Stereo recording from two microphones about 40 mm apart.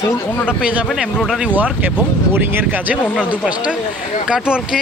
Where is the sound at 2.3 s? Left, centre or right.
Right.